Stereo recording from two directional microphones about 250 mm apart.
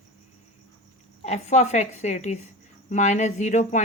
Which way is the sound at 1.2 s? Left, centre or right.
Left.